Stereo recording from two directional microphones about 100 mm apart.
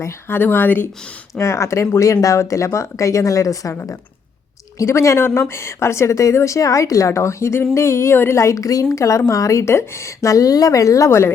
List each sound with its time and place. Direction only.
0.0 s speech: 20° left (ahead or behind)